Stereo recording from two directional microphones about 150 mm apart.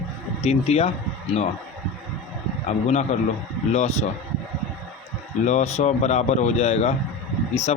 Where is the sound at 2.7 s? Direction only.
50° left (ahead or behind).